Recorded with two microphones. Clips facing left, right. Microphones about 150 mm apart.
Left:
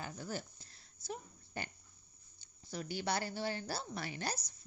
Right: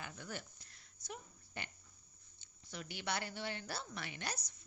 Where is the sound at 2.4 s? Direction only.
35° left (ahead or behind).